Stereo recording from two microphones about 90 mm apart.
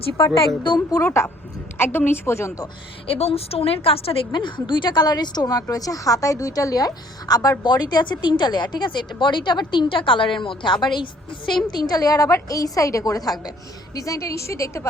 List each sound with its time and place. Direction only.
0.6 s speech: 60° left (ahead or behind)
1.0 s a woman's voice: 30° left (ahead or behind)
3.1 s a woman's voice: 90° left
4.3 s a woman's voice: 60° left (ahead or behind)
11.8 s a woman's voice: 45° left (ahead or behind)